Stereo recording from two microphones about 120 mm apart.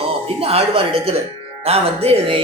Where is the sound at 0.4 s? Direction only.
55° right (ahead or behind).